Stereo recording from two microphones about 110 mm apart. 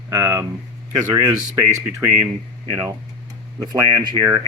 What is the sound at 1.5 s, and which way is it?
Speech, 25° right (ahead or behind).